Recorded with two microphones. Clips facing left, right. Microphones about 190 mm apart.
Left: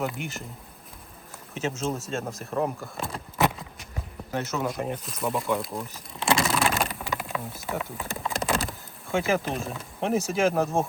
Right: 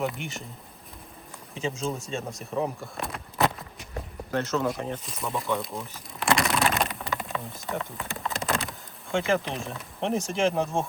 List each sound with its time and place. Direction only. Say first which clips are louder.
0.0 s speech: even; centre (ahead or behind)
1.5 s speech: left 1 dB; 5° left (ahead or behind)
3.3 s a sound: left 1 dB; centre (ahead or behind)
4.3 s speech: right 2 dB; 10° left (ahead or behind)
5.0 s speech: left 3 dB; centre (ahead or behind)
6.3 s a sound: even; centre (ahead or behind)
9.1 s speech: left 1 dB; 5° left (ahead or behind)